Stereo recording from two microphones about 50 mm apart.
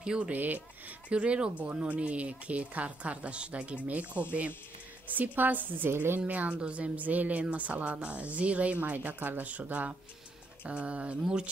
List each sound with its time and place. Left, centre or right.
0.0 s speech: centre
0.3 s a woman's voice: right
1.1 s a woman's voice: right
5.9 s speech: right
6.3 s a woman's voice: right